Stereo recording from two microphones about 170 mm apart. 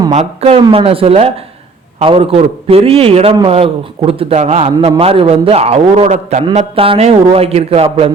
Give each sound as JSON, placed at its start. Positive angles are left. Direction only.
{"t": 0.1, "sound": "a man's voice", "side_deg": -40}